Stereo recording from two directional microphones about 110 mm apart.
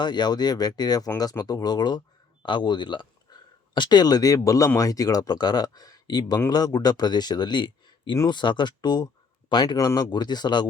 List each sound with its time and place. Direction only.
0.0 s speech: 40° left (ahead or behind)